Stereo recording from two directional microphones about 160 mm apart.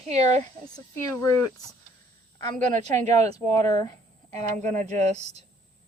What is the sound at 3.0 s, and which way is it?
Speech, 20° left (ahead or behind).